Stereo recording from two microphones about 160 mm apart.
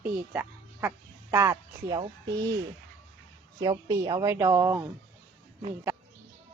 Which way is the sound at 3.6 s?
20° right (ahead or behind).